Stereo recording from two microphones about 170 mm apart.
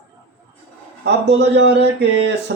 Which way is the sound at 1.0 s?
90° right.